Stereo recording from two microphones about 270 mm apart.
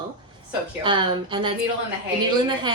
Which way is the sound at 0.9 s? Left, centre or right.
Centre.